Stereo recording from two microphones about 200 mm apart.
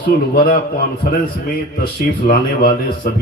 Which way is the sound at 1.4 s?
45° left (ahead or behind).